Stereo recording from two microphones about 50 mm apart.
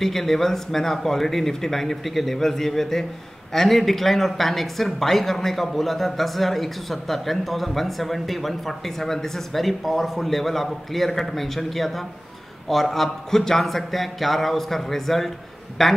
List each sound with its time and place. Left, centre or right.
0.0 s speech: centre